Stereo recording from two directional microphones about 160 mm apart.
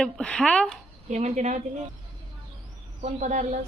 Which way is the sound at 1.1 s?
45° right (ahead or behind).